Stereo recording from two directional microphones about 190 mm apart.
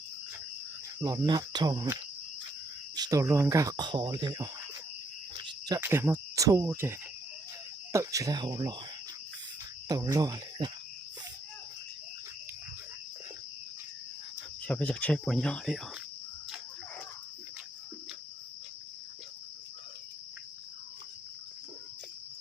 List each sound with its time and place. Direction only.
0.9 s speech: 20° right (ahead or behind)
5.4 s cricket: 20° right (ahead or behind)
7.9 s speech: 15° right (ahead or behind)
9.9 s speech: 20° right (ahead or behind)
14.7 s speech: 5° left (ahead or behind)